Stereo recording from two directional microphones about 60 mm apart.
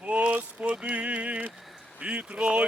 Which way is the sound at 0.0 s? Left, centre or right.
Right.